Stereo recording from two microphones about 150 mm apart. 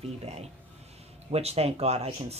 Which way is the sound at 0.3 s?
45° right (ahead or behind).